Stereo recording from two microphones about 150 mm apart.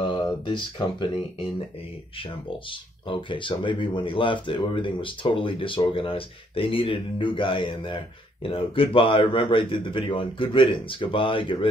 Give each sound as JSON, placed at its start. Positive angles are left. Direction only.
{"t": 0.0, "sound": "speech", "side_deg": 35}